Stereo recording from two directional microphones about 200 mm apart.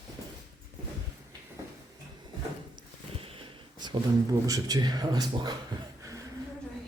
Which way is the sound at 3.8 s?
20° right (ahead or behind).